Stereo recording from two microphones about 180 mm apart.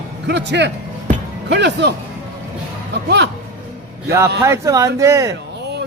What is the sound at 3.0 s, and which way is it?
Speech, 70° right (ahead or behind).